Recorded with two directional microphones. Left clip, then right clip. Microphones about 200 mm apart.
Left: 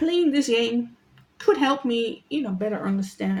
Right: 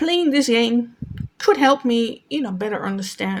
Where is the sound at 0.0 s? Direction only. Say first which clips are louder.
Right 3 dB; 40° right (ahead or behind).